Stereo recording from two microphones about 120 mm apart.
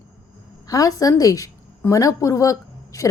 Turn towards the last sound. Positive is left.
turn(degrees=25)  # may be behind; listen again after turning